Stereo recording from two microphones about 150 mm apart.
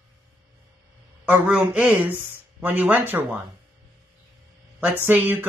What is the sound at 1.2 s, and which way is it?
Speech, 10° right (ahead or behind).